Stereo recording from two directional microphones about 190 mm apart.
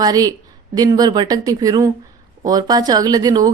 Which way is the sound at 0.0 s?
20° right (ahead or behind).